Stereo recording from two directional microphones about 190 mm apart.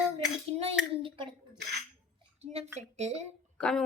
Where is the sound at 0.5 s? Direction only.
30° right (ahead or behind).